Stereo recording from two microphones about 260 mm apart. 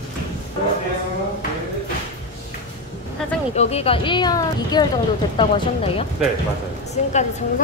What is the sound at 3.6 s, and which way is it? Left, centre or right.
A woman's voice, left.